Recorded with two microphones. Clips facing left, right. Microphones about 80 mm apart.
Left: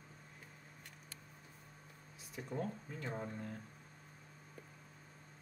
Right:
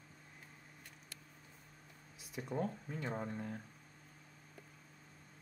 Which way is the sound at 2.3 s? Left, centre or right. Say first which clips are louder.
Right 2 dB; centre.